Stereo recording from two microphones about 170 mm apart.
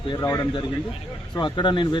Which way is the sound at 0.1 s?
15° left (ahead or behind).